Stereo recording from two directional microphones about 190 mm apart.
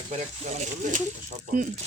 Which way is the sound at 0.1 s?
40° right (ahead or behind).